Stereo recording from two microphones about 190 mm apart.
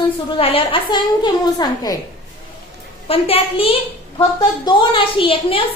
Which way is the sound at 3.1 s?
30° left (ahead or behind).